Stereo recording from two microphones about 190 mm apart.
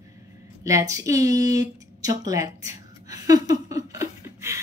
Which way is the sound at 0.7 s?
15° right (ahead or behind).